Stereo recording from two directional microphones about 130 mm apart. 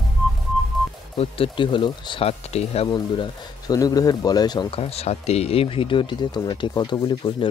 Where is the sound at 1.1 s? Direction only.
45° left (ahead or behind).